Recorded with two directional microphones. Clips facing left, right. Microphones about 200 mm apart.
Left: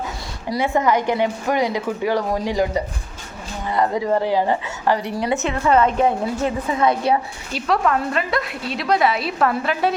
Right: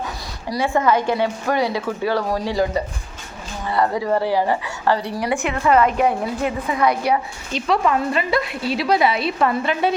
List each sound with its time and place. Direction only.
0.5 s a woman's voice: 20° left (ahead or behind)
7.5 s a woman's voice: centre (ahead or behind)